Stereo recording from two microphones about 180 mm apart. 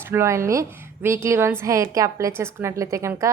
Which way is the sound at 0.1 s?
15° right (ahead or behind).